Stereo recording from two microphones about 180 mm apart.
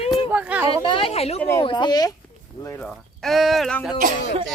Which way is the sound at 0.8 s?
30° left (ahead or behind).